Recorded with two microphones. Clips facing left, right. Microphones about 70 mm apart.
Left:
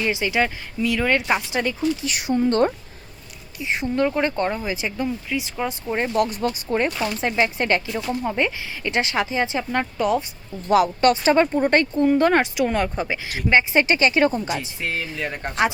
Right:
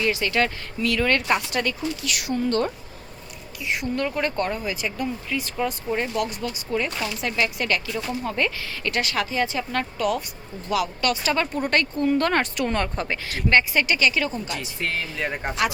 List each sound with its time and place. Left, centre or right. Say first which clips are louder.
0.0 s speech: left 1 dB; centre
2.0 s speech: left 1 dB; left
4.0 s speech: left 5 dB; centre
5.3 s speech: even; centre
6.1 s speech: left 5 dB; left
8.2 s speech: left 2 dB; centre
10.7 s speech: left 7 dB; left
12.0 s speech: left 3 dB; centre
13.7 s speech: left 4 dB; left
14.4 s speech: left 2 dB; centre
15.2 s speech: right 1 dB; centre